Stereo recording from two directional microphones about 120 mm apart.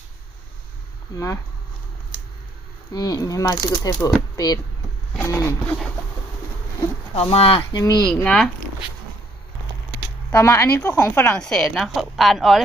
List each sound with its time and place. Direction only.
1.1 s speech: 25° left (ahead or behind)
2.9 s speech: 30° left (ahead or behind)
5.2 s a sound: 25° left (ahead or behind)
7.1 s speech: 55° left (ahead or behind)
7.8 s speech: 35° left (ahead or behind)
8.0 s speech: 10° left (ahead or behind)
10.3 s speech: 20° left (ahead or behind); by 12.6 s centre (ahead or behind)